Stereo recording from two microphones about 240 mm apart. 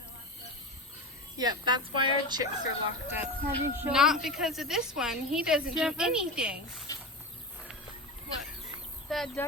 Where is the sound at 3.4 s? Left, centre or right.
Centre.